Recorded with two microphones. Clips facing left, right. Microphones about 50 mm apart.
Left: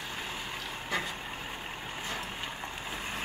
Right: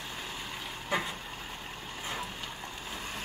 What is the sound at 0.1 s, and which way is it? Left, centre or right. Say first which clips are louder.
Vehicle: left 2 dB; centre.